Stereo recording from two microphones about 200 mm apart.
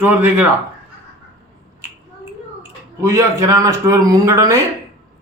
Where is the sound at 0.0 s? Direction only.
10° right (ahead or behind).